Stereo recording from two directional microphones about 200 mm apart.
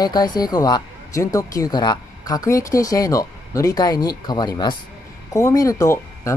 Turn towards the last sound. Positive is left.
turn(degrees=15)  # may be behind; listen again after turning